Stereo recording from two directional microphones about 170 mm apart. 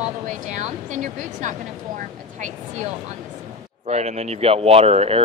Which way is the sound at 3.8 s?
40° right (ahead or behind).